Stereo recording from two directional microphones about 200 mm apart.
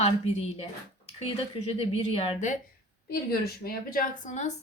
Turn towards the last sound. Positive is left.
turn(degrees=35)  # may be behind; listen again after turning